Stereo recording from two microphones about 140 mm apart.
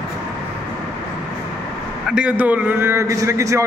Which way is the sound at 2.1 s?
10° right (ahead or behind).